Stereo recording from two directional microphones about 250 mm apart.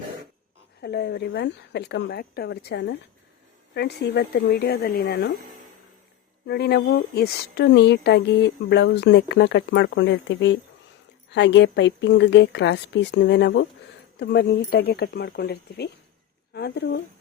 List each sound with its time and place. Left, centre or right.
0.8 s speech: left
6.5 s speech: left